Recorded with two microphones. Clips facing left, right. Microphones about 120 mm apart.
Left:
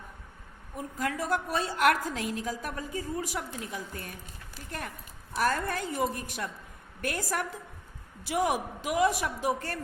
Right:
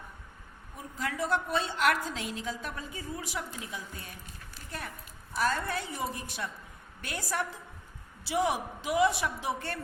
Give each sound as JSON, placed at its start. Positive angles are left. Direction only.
{"t": 0.8, "sound": "a woman's voice", "side_deg": 45}
{"t": 5.4, "sound": "a woman's voice", "side_deg": 45}